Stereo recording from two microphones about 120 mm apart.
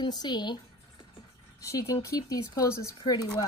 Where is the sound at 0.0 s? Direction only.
35° left (ahead or behind).